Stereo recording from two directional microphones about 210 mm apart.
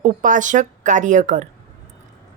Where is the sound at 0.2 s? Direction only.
40° right (ahead or behind).